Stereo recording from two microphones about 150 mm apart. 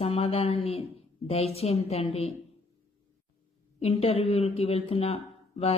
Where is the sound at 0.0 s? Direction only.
40° left (ahead or behind).